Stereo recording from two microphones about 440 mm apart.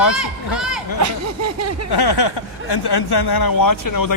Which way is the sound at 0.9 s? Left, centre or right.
Right.